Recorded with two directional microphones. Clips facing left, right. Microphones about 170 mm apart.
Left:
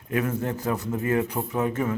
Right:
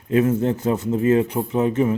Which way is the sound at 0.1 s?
25° right (ahead or behind).